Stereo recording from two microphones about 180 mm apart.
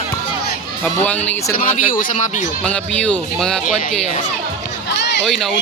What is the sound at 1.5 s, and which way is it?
Speech, 50° left (ahead or behind).